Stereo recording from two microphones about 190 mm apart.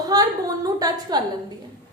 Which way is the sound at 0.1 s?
20° right (ahead or behind).